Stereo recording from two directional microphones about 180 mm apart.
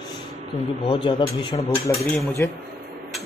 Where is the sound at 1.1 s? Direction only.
30° left (ahead or behind).